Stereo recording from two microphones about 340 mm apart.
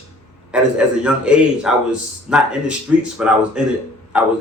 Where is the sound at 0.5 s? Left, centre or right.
Centre.